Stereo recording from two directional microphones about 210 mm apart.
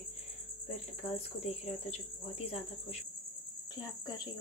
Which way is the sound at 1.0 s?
30° left (ahead or behind).